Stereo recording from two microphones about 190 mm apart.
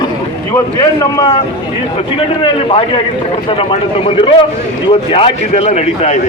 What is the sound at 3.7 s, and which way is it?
A man's voice, 30° left (ahead or behind).